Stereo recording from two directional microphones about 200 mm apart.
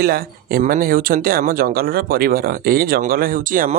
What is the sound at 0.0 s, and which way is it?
Speech, 50° right (ahead or behind).